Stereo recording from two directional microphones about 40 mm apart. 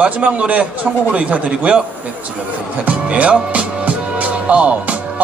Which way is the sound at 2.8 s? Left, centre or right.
Right.